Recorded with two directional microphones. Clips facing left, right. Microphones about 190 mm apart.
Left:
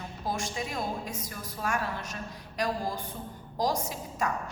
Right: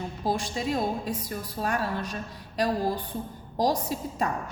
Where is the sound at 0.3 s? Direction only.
30° right (ahead or behind).